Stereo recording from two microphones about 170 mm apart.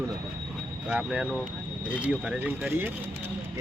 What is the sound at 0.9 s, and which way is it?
Speech, 5° right (ahead or behind).